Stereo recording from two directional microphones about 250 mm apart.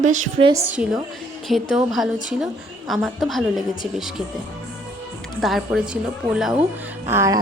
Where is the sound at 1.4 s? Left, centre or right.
Centre.